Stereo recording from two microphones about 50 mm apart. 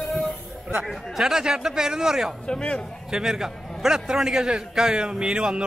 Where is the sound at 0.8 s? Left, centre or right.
Centre.